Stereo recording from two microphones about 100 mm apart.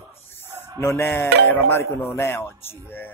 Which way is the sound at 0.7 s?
25° left (ahead or behind).